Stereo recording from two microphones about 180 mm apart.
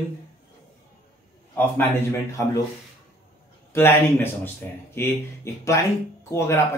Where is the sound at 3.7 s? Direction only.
10° left (ahead or behind).